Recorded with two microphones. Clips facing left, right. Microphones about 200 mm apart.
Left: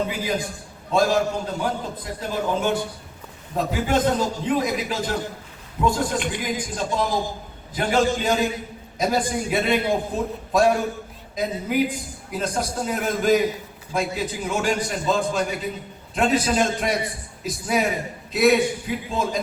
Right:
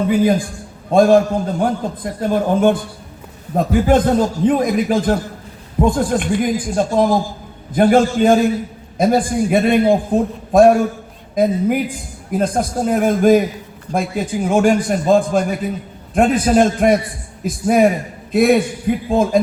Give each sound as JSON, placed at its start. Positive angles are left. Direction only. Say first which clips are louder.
{"t": 0.1, "sound": "a man's voice", "louder": "right 11 dB", "side_deg": -50}